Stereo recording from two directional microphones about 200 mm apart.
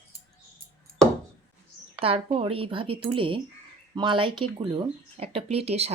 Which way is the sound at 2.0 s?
30° right (ahead or behind).